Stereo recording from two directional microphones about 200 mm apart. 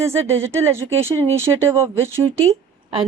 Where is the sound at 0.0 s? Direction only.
15° right (ahead or behind).